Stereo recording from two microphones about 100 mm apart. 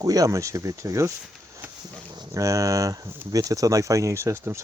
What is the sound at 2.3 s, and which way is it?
Speech, 35° right (ahead or behind).